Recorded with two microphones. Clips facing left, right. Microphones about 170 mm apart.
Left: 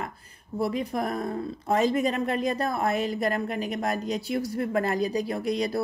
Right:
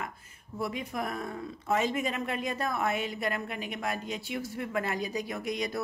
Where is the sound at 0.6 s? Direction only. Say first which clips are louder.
Left 6 dB; 35° left (ahead or behind).